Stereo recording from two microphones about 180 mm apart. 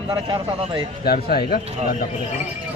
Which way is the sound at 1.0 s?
55° left (ahead or behind).